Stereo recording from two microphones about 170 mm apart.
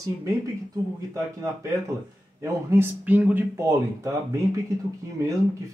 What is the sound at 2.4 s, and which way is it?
Speech, 15° right (ahead or behind).